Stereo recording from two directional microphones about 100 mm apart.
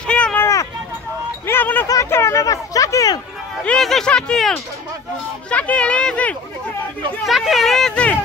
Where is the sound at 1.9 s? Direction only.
30° left (ahead or behind).